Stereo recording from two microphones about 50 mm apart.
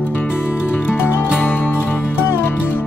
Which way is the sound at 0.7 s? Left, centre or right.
Left.